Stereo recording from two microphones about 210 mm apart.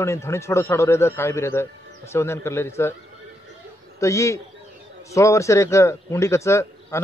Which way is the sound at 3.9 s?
15° left (ahead or behind).